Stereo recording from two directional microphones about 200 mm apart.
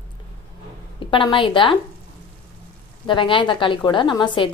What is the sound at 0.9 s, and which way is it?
Speech, 25° left (ahead or behind).